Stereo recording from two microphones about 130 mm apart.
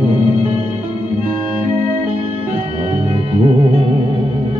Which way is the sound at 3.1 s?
45° right (ahead or behind).